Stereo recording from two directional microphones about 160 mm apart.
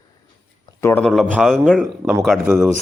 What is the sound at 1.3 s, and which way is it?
Speech, centre (ahead or behind).